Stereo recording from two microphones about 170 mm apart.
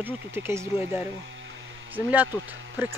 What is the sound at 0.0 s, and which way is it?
Speech, 15° right (ahead or behind).